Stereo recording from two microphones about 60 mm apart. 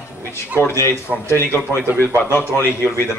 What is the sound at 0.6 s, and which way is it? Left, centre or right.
A man's voice, left.